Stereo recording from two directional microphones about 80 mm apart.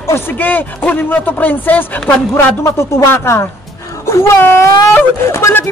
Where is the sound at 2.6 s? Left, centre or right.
Left.